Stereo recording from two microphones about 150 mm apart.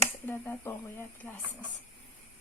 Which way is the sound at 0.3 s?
15° left (ahead or behind).